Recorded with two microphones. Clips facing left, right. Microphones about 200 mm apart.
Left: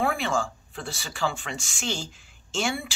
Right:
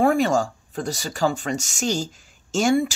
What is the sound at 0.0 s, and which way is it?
Speech, 40° right (ahead or behind).